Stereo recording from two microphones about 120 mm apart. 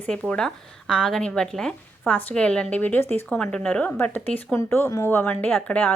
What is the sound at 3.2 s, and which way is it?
A woman's voice, 5° left (ahead or behind).